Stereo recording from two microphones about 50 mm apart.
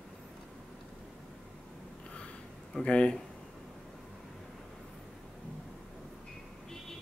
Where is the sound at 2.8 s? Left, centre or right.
Left.